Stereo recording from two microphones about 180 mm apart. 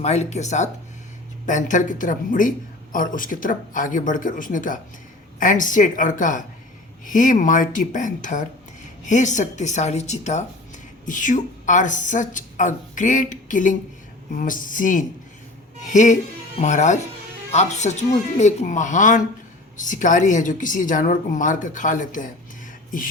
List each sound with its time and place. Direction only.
0.0 s a woman's voice: 40° left (ahead or behind)